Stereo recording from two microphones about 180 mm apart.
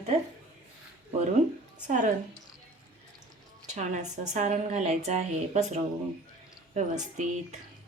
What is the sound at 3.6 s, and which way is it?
A woman's voice, 40° right (ahead or behind).